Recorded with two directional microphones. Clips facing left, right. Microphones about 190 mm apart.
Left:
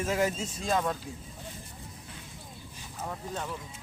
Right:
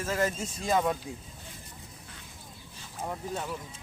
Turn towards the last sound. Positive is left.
turn(degrees=-5)  # may be behind; listen again after turning